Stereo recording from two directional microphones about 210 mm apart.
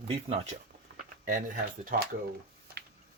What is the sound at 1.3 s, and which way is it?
Speech, 40° right (ahead or behind).